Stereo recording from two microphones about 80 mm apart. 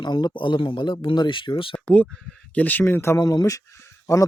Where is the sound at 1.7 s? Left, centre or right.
Centre.